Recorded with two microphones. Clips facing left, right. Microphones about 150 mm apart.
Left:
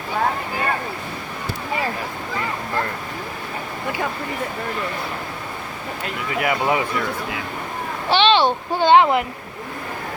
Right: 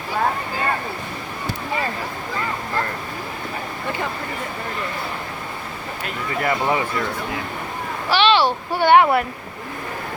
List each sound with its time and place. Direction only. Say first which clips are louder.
6.4 s speech: even; 10° left (ahead or behind)
8.1 s a child's voice: left 1 dB; 25° left (ahead or behind)